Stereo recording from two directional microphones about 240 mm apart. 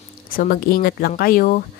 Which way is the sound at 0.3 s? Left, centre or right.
Left.